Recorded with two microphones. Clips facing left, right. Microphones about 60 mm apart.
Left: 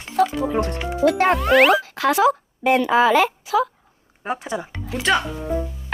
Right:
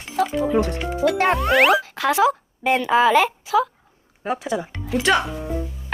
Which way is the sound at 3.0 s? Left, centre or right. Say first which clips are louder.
Even; right.